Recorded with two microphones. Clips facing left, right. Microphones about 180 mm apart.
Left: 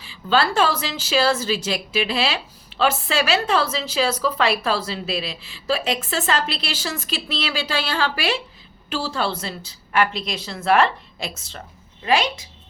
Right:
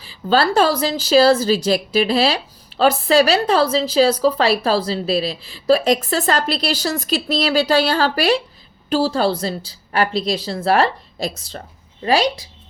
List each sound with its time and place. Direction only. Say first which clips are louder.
0.0 s a woman's voice: right 3 dB; 40° right (ahead or behind)